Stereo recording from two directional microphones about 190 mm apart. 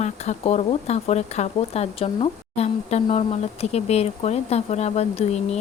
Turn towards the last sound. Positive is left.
turn(degrees=35)  # may be behind; listen again after turning